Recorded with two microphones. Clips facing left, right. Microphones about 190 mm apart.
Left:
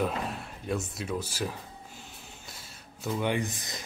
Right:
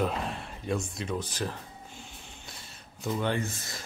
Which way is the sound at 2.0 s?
Centre (ahead or behind).